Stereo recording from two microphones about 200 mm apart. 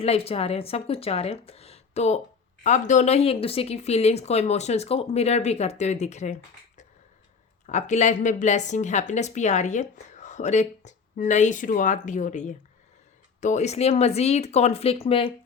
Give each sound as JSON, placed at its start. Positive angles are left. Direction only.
{"t": 0.0, "sound": "a woman's voice", "side_deg": 30}